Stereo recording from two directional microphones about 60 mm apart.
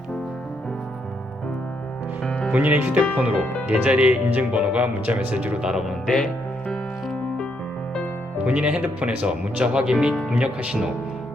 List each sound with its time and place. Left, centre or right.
2.5 s speech: right
5.6 s speech: centre
8.4 s speech: centre